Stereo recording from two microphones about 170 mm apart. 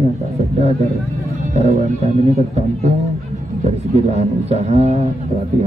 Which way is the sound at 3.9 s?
40° right (ahead or behind).